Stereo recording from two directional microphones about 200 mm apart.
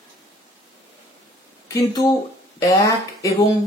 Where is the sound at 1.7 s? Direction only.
15° left (ahead or behind).